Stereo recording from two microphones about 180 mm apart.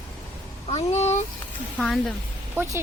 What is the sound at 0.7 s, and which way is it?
Speech, 35° left (ahead or behind).